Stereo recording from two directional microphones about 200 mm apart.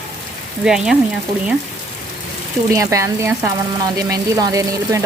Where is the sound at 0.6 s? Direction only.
5° right (ahead or behind).